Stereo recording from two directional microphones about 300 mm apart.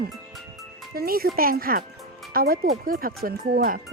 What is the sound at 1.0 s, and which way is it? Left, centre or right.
Speech, right.